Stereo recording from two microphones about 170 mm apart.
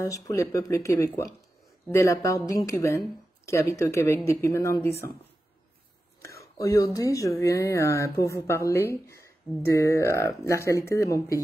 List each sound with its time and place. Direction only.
0.0 s speech: 20° left (ahead or behind)
6.4 s speech: 20° left (ahead or behind)
9.5 s speech: centre (ahead or behind)
9.8 s speech: 15° left (ahead or behind)